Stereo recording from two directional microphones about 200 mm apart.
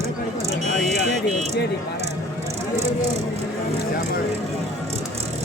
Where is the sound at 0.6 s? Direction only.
35° right (ahead or behind).